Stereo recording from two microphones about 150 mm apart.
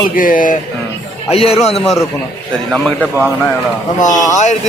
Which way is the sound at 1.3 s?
40° left (ahead or behind).